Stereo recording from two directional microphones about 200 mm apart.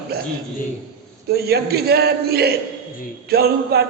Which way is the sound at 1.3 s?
50° right (ahead or behind).